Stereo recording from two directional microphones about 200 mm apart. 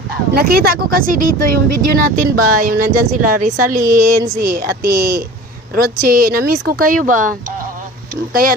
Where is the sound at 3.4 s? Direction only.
40° right (ahead or behind).